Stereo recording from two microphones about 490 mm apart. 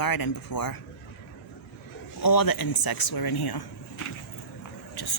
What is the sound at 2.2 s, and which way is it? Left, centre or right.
Speech, left.